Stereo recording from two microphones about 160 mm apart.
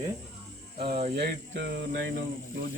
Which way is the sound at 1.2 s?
90° right.